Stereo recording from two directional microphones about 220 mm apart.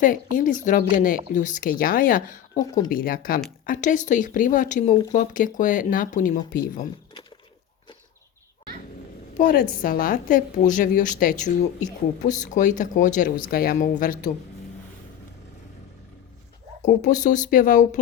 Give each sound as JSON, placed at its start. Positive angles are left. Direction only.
{"t": 0.3, "sound": "speech", "side_deg": 35}
{"t": 9.4, "sound": "speech", "side_deg": 40}
{"t": 16.8, "sound": "speech", "side_deg": 35}